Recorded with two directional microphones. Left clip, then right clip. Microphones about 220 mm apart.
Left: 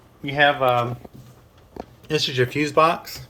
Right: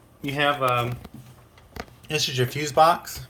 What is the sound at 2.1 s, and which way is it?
Speech, 15° left (ahead or behind).